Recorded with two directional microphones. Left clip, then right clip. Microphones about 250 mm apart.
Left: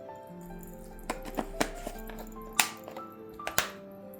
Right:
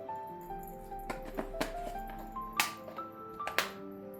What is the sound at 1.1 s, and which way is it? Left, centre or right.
Music, left.